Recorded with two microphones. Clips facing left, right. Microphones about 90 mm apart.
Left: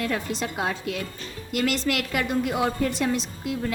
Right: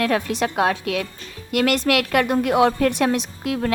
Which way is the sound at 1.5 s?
60° right (ahead or behind).